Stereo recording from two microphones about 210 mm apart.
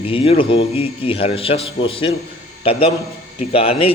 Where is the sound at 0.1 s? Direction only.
25° left (ahead or behind).